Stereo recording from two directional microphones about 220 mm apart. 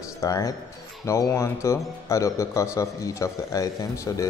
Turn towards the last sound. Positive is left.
turn(degrees=15)  # may be behind; listen again after turning